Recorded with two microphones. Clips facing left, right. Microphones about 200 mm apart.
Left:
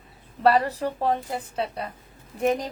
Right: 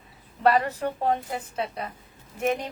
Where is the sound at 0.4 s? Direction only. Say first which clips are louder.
Left 1 dB; 35° left (ahead or behind).